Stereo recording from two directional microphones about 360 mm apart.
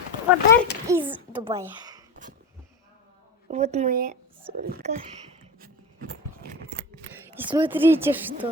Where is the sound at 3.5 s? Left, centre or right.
Centre.